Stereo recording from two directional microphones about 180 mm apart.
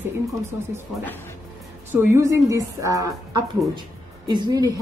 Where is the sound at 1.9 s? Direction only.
15° right (ahead or behind).